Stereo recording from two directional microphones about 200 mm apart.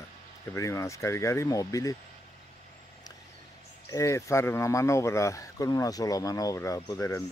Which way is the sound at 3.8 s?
15° left (ahead or behind).